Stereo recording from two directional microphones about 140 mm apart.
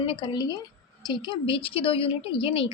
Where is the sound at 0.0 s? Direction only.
40° left (ahead or behind).